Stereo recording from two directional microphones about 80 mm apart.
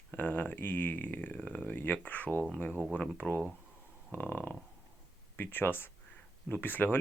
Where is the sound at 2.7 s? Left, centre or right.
Centre.